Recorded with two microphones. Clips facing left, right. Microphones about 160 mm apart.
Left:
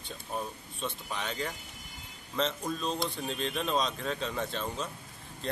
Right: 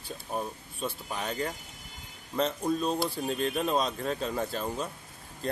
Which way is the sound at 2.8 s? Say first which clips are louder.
Right 4 dB; 10° right (ahead or behind).